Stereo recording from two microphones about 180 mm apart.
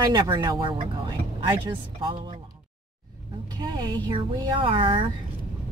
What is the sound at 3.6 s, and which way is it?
Speech, 25° right (ahead or behind).